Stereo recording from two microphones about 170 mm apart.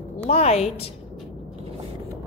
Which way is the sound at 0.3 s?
40° left (ahead or behind).